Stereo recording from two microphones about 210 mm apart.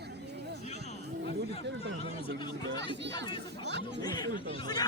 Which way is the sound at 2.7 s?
55° right (ahead or behind).